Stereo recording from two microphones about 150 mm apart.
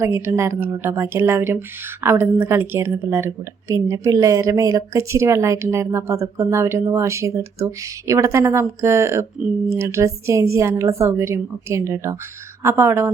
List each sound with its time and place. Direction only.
0.0 s a woman's voice: 20° right (ahead or behind)